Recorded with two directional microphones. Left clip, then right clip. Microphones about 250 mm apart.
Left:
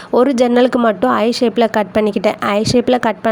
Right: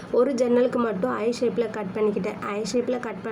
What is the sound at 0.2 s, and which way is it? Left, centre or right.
Speech, left.